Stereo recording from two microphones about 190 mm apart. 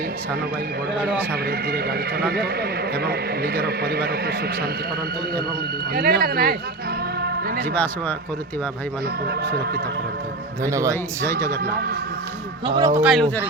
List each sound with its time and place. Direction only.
1.3 s a man's voice: 55° right (ahead or behind)
5.9 s speech: 50° right (ahead or behind)
7.2 s a sound: 55° right (ahead or behind)
7.7 s speech: 10° left (ahead or behind)
9.2 s a man's voice: 55° right (ahead or behind)
10.6 s a man's voice: 15° right (ahead or behind)
11.3 s speech: 15° left (ahead or behind)
11.6 s a man's voice: 55° right (ahead or behind)
12.6 s speech: 25° right (ahead or behind)
13.0 s speech: 5° right (ahead or behind)